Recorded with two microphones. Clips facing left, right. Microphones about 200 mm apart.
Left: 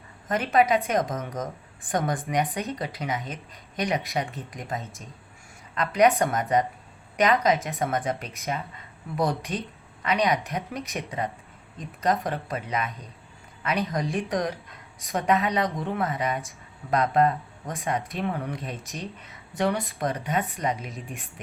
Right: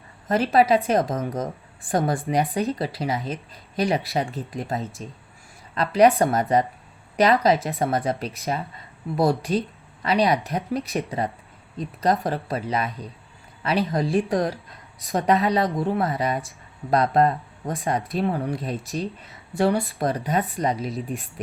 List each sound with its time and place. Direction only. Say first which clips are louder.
0.3 s speech: right 4 dB; 30° right (ahead or behind)